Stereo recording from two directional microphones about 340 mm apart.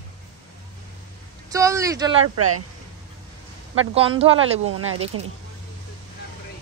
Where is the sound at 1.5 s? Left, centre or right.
Centre.